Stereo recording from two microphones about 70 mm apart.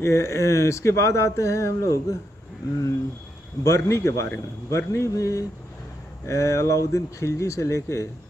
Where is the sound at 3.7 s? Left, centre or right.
Left.